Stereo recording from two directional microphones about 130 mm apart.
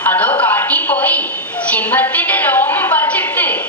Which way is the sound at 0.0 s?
15° left (ahead or behind).